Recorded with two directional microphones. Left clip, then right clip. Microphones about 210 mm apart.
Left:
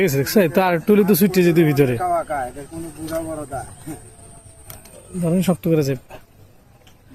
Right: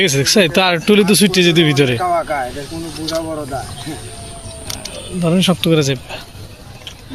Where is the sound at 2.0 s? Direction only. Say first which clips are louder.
Right 4 dB; 5° right (ahead or behind).